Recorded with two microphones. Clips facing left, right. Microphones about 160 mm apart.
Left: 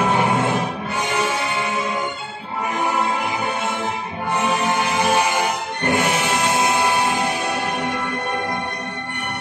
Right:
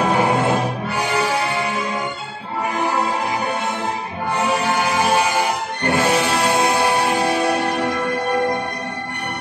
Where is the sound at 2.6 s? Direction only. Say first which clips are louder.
Right 1 dB; 30° right (ahead or behind).